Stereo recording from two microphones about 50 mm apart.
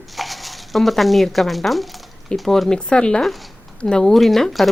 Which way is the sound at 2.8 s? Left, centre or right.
Centre.